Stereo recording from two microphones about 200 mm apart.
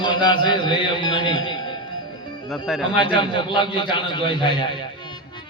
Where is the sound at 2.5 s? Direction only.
Centre (ahead or behind).